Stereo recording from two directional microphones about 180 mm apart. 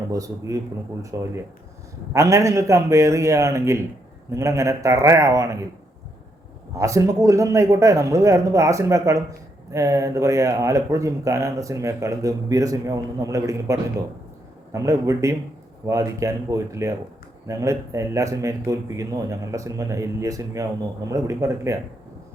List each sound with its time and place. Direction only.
0.1 s a man's voice: 20° right (ahead or behind)
6.7 s speech: 15° right (ahead or behind)